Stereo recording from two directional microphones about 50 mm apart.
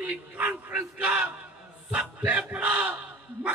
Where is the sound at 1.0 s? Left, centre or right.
Right.